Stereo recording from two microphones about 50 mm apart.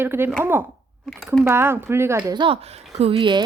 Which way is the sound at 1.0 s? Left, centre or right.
Centre.